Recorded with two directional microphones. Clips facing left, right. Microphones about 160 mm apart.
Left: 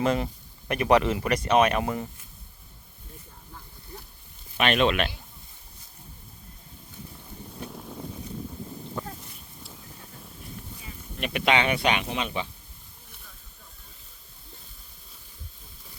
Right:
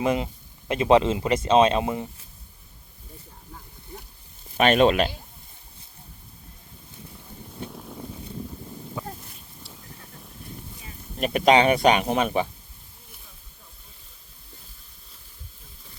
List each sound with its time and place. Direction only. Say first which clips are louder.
0.0 s speech: right 1 dB; 20° right (ahead or behind)
4.5 s speech: right 5 dB; 40° right (ahead or behind)
7.2 s a sound: right 2 dB; centre (ahead or behind)
11.2 s speech: right 6 dB; 40° right (ahead or behind)